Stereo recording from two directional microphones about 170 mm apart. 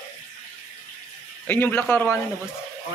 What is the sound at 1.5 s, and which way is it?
Speech, 10° left (ahead or behind).